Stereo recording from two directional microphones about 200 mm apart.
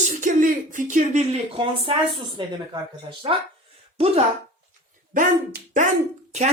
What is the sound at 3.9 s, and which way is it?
Speech, 30° right (ahead or behind).